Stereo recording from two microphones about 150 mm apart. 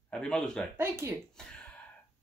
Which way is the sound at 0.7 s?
15° right (ahead or behind).